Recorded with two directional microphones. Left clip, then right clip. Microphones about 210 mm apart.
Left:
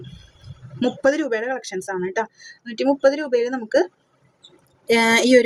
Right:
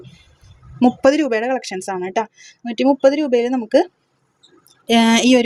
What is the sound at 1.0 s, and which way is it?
A woman's voice, 35° right (ahead or behind).